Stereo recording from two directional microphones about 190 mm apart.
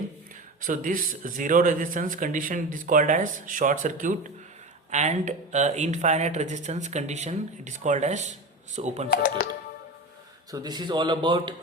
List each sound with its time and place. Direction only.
0.6 s speech: 45° right (ahead or behind)
9.0 s speech: 50° left (ahead or behind)
10.5 s a man's voice: 20° right (ahead or behind)